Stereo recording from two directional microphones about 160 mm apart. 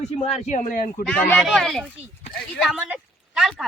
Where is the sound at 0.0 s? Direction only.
40° left (ahead or behind).